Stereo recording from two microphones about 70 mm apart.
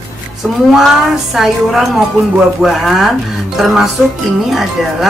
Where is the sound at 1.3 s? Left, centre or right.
Centre.